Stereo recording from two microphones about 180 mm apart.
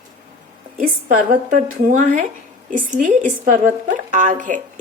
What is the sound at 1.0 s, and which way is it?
Speech, 45° right (ahead or behind).